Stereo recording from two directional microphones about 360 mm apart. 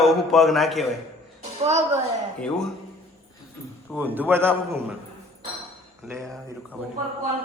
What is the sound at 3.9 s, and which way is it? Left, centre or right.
Speech, centre.